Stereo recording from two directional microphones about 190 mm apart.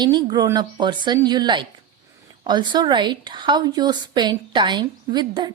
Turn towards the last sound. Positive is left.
turn(degrees=-20)  # may be behind; listen again after turning